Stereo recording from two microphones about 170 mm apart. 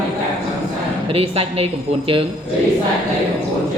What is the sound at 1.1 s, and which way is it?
Speech, 35° right (ahead or behind).